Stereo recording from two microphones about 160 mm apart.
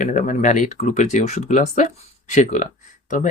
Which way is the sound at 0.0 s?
50° left (ahead or behind).